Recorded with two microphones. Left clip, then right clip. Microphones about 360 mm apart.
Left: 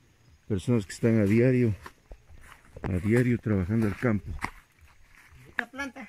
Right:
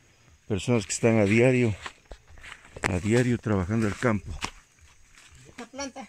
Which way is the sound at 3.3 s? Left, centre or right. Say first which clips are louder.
Right 2 dB; centre.